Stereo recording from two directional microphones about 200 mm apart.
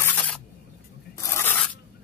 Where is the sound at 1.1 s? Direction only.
15° left (ahead or behind).